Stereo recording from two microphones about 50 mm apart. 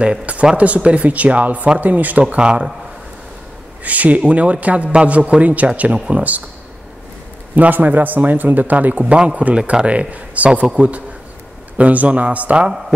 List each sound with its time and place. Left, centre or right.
0.0 s a sound: right
0.6 s a man's voice: right
3.8 s a man's voice: right
7.5 s a man's voice: right